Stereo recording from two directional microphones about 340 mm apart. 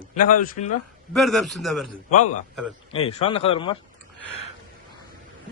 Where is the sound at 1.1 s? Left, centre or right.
Centre.